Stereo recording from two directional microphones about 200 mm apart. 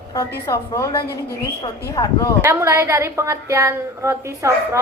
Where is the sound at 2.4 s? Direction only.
15° right (ahead or behind).